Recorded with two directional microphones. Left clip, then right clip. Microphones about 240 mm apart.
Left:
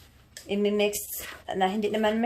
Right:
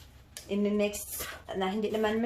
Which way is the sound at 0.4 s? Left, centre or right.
Left.